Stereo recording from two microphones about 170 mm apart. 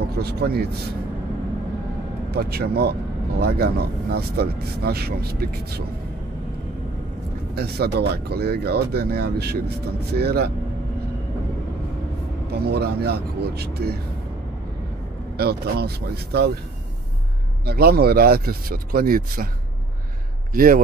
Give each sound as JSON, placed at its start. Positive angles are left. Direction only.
{"t": 0.2, "sound": "speech", "side_deg": -70}
{"t": 2.3, "sound": "speech", "side_deg": -65}
{"t": 7.5, "sound": "speech", "side_deg": -65}
{"t": 12.4, "sound": "speech", "side_deg": -70}
{"t": 15.3, "sound": "speech", "side_deg": -65}
{"t": 17.6, "sound": "speech", "side_deg": -65}
{"t": 20.5, "sound": "a man's voice", "side_deg": -55}